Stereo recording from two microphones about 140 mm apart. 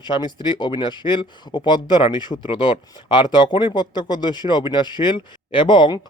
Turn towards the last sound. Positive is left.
turn(degrees=35)  # may be behind; listen again after turning